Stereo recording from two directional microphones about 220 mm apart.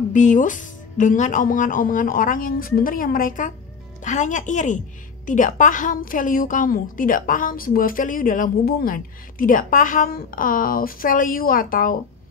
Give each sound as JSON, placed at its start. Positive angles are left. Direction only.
{"t": 0.1, "sound": "a woman's voice", "side_deg": 35}